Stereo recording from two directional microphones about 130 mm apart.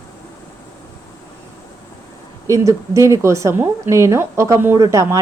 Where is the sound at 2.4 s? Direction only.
25° right (ahead or behind).